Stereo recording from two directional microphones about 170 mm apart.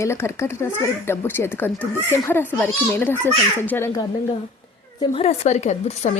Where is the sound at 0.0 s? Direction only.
15° left (ahead or behind).